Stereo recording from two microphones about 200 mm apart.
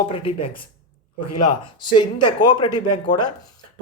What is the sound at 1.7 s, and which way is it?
Speech, 20° left (ahead or behind).